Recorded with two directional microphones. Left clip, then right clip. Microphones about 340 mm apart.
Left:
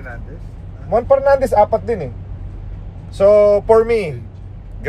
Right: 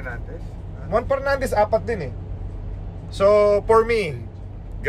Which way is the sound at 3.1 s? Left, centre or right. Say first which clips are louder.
Left 5 dB; centre.